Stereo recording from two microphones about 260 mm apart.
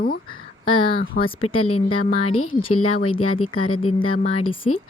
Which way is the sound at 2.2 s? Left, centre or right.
Left.